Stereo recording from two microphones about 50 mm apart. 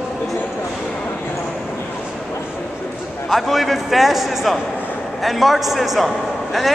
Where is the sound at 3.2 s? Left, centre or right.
Centre.